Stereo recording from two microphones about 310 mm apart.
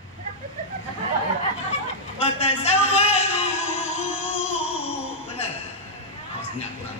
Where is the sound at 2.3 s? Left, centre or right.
Centre.